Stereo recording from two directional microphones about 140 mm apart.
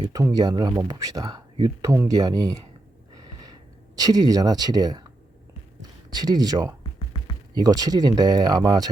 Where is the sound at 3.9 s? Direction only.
25° right (ahead or behind).